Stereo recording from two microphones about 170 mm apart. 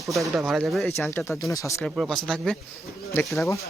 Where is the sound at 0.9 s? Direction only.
15° left (ahead or behind).